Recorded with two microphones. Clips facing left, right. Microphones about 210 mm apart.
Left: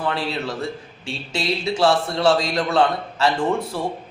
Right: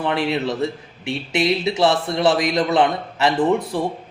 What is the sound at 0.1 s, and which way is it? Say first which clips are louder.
A man's voice: right 5 dB; 20° right (ahead or behind).